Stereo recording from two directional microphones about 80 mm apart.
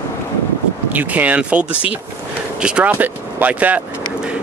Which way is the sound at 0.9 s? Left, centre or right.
Right.